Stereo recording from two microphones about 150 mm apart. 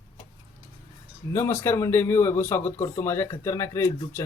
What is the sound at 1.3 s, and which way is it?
Speech, 15° left (ahead or behind).